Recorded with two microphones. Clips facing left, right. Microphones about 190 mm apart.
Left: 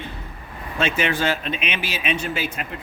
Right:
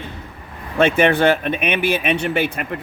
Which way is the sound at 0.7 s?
55° right (ahead or behind).